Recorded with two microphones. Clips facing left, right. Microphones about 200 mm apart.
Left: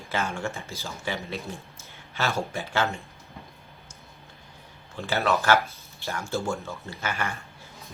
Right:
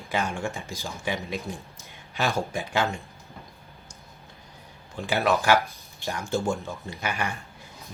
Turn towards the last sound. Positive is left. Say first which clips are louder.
# right 1 dB
turn(degrees=-15)  # may be behind; listen again after turning